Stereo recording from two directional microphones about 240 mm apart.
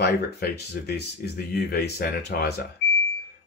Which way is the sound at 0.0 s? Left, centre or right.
Left.